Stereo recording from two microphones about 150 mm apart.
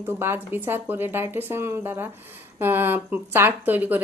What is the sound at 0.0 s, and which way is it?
Speech, 15° right (ahead or behind).